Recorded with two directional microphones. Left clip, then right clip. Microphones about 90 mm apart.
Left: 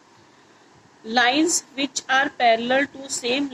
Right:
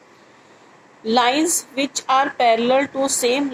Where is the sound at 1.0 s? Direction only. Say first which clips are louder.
Right 2 dB; 30° right (ahead or behind).